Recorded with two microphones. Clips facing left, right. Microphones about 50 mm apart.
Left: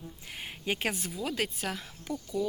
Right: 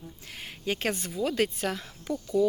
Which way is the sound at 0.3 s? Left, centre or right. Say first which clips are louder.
Right 2 dB; centre.